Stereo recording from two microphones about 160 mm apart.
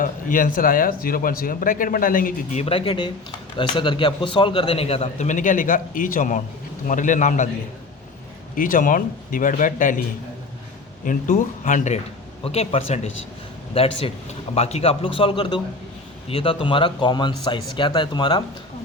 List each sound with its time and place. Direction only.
0.0 s speech: 60° left (ahead or behind)
2.6 s speech: 35° left (ahead or behind)
8.5 s speech: 60° left (ahead or behind)
11.0 s speech: 55° left (ahead or behind)
12.5 s speech: 40° left (ahead or behind)